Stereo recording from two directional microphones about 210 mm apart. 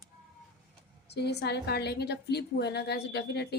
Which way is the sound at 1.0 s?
50° left (ahead or behind).